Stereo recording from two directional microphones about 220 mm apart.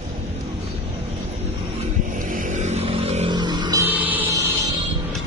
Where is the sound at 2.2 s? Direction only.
35° right (ahead or behind); by 4.5 s 10° right (ahead or behind).